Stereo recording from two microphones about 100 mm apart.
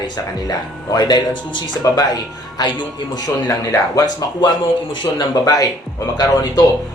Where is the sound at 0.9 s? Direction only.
45° left (ahead or behind).